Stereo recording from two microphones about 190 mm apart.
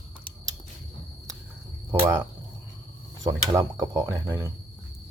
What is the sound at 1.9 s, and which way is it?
Speech, 15° right (ahead or behind).